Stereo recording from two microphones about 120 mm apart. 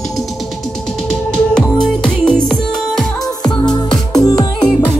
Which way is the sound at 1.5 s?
5° left (ahead or behind).